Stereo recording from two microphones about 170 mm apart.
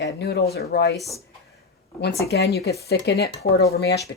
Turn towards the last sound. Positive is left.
turn(degrees=75)  # may be behind; listen again after turning